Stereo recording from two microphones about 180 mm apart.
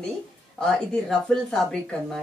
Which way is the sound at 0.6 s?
5° left (ahead or behind).